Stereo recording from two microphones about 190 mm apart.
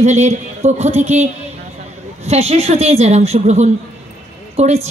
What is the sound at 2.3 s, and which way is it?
Speech, 35° right (ahead or behind).